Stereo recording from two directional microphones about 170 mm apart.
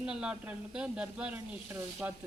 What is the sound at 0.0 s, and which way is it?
Speech, 5° right (ahead or behind).